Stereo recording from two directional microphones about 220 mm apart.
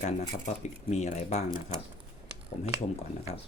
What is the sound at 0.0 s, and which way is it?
Speech, 30° left (ahead or behind).